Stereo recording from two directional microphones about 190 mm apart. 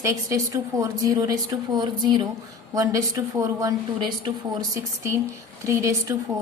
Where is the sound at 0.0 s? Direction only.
15° right (ahead or behind).